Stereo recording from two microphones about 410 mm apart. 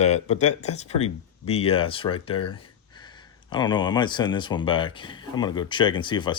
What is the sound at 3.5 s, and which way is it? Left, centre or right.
Speech, centre.